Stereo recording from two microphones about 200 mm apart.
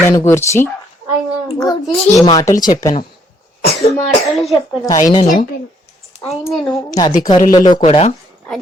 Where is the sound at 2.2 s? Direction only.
15° left (ahead or behind).